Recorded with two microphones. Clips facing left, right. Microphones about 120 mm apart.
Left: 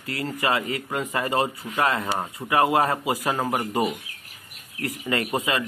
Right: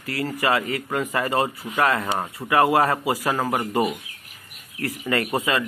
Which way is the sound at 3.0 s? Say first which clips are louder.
Right 2 dB; 20° left (ahead or behind).